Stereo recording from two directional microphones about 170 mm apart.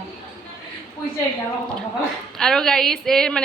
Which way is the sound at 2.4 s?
5° left (ahead or behind).